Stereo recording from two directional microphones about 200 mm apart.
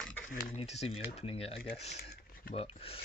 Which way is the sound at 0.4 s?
30° left (ahead or behind).